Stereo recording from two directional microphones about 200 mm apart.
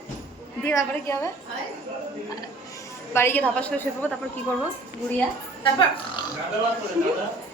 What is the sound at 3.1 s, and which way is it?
A woman's voice, 10° left (ahead or behind).